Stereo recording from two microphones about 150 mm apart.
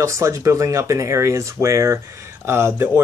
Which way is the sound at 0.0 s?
20° right (ahead or behind).